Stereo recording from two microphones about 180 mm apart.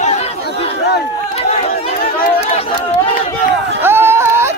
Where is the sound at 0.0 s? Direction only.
35° left (ahead or behind).